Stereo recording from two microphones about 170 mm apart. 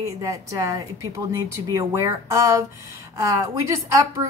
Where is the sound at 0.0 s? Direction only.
20° right (ahead or behind).